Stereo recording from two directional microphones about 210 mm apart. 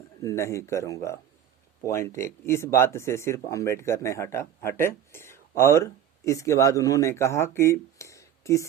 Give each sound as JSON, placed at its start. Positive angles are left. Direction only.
{"t": 0.2, "sound": "speech", "side_deg": 15}